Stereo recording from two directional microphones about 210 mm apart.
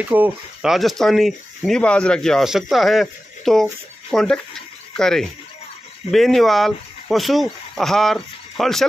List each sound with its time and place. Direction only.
0.0 s speech: 10° right (ahead or behind)